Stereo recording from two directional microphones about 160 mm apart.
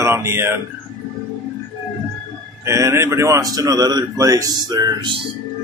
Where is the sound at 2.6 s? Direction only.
20° right (ahead or behind).